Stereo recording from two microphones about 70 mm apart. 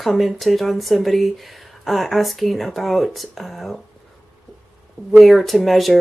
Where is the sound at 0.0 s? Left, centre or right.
Centre.